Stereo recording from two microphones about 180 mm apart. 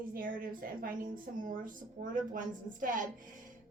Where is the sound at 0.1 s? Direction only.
50° right (ahead or behind).